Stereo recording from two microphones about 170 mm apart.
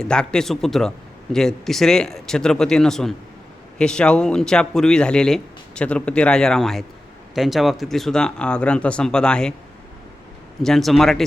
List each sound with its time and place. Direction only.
0.0 s a man's voice: 5° left (ahead or behind)
10.6 s a man's voice: centre (ahead or behind)